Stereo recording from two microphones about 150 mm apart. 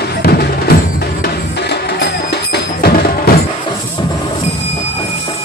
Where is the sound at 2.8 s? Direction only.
90° left.